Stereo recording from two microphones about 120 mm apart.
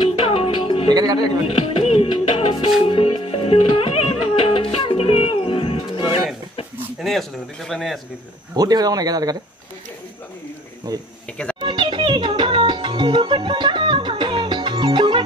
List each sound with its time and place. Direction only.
0.0 s music: 50° left (ahead or behind)
0.8 s speech: 35° right (ahead or behind)
1.5 s music: 50° left (ahead or behind)
7.0 s a man's voice: centre (ahead or behind)
8.5 s speech: 30° right (ahead or behind)
10.9 s speech: 30° right (ahead or behind)
11.6 s music: 40° right (ahead or behind)